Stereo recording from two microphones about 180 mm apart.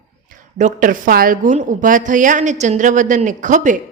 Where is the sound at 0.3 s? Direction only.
45° right (ahead or behind).